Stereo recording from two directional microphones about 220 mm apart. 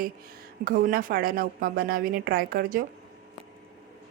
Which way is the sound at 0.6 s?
40° right (ahead or behind).